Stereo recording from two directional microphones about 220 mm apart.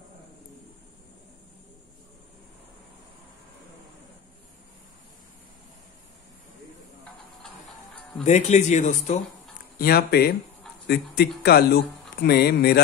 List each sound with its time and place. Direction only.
7.4 s music: 5° left (ahead or behind)
8.2 s speech: 30° left (ahead or behind)
9.8 s speech: 45° left (ahead or behind)